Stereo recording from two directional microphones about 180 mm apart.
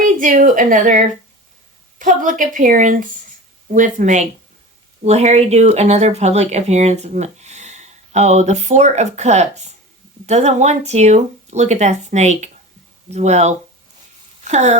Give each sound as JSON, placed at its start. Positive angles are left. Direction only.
{"t": 0.0, "sound": "a woman's voice", "side_deg": -45}